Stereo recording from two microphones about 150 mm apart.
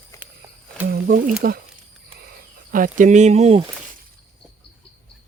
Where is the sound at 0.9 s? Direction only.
80° right.